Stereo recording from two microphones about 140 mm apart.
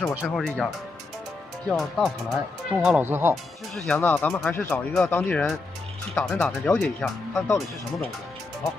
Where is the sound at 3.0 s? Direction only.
15° right (ahead or behind).